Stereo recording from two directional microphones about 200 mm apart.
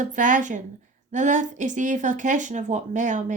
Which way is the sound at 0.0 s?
40° right (ahead or behind).